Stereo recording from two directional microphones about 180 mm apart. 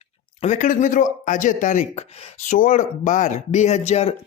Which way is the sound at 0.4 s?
40° left (ahead or behind).